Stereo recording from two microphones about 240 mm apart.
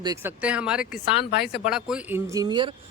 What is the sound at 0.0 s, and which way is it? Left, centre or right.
Speech, centre.